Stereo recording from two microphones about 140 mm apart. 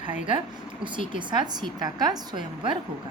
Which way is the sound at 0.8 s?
35° right (ahead or behind).